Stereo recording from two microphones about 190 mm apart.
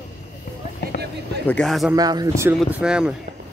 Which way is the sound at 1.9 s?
20° right (ahead or behind).